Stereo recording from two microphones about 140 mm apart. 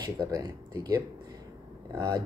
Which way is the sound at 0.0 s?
25° right (ahead or behind).